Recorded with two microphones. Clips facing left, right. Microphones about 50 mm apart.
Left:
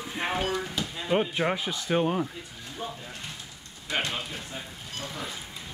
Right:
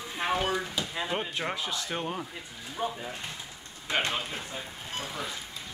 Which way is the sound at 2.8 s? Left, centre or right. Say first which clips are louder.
Right 4 dB; right.